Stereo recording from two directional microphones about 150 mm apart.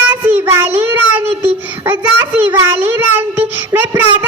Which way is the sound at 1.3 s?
40° right (ahead or behind).